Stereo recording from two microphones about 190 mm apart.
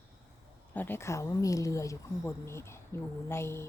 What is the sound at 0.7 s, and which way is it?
A woman's voice, 10° left (ahead or behind).